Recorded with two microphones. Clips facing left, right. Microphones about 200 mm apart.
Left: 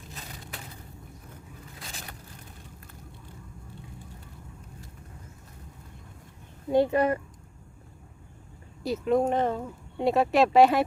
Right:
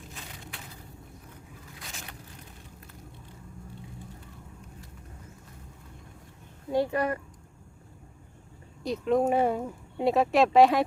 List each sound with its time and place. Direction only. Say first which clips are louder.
0.1 s a sound: left 2 dB; 35° left (ahead or behind)
1.8 s vehicle: left 1 dB; 35° left (ahead or behind)
6.7 s speech: left 4 dB; 20° left (ahead or behind)
8.8 s speech: left 1 dB; 5° left (ahead or behind)
10.0 s speech: even; centre (ahead or behind)